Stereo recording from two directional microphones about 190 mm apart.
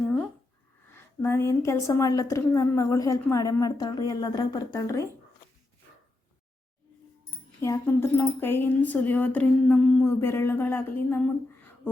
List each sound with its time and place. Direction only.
0.9 s a woman's voice: 10° left (ahead or behind)
7.6 s a woman's voice: 15° left (ahead or behind)